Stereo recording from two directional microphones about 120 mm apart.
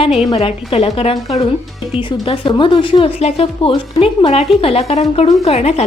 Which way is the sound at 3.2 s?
55° left (ahead or behind).